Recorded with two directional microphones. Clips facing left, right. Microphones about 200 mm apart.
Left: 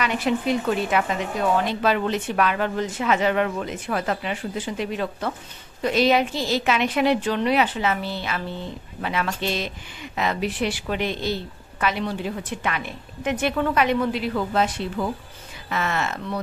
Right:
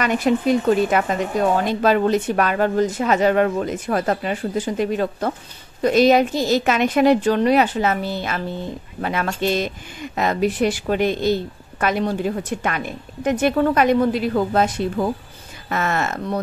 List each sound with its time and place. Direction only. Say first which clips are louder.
0.0 s speech: right 5 dB; 45° right (ahead or behind)